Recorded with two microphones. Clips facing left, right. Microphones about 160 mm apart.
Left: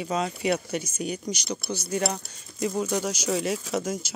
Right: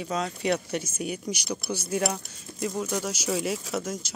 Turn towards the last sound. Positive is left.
turn(degrees=0)  # may be behind; listen again after turning